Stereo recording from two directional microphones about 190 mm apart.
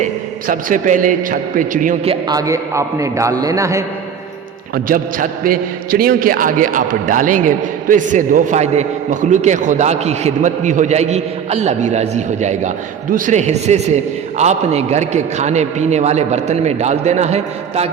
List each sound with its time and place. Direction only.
0.4 s a man's voice: 45° right (ahead or behind)
2.0 s a man's voice: 20° right (ahead or behind)
4.7 s a man's voice: 45° right (ahead or behind)